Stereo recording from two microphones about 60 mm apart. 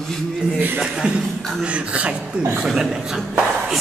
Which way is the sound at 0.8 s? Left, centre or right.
Centre.